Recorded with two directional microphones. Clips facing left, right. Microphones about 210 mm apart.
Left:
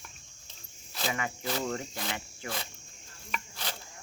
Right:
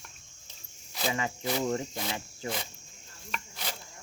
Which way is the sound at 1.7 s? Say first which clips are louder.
Right 3 dB; 25° right (ahead or behind).